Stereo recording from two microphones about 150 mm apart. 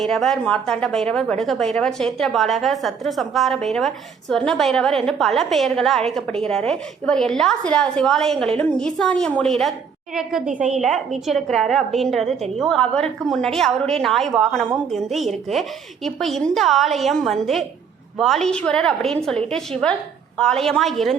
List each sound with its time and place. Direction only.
0.0 s a woman's voice: centre (ahead or behind)
10.5 s a woman's voice: 55° right (ahead or behind)
10.8 s a woman's voice: centre (ahead or behind)